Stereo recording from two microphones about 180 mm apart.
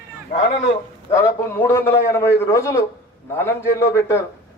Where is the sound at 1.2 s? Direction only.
10° left (ahead or behind).